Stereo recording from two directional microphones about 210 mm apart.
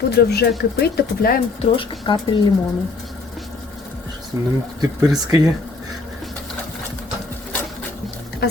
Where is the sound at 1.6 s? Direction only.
25° left (ahead or behind).